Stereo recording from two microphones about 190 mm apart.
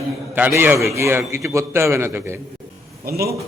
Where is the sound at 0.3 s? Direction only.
10° right (ahead or behind).